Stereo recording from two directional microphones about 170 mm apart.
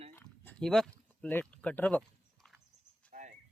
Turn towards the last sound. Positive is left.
turn(degrees=-45)  # may be behind; listen again after turning